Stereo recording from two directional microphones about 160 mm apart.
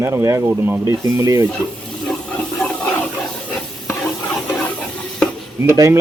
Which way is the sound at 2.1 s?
5° left (ahead or behind).